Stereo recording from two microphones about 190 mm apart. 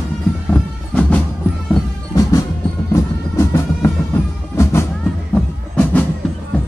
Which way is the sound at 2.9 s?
15° left (ahead or behind).